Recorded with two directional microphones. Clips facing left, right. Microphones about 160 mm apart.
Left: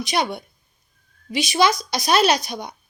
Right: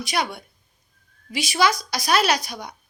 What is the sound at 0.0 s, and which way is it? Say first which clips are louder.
A woman's voice: left 3 dB; 20° left (ahead or behind).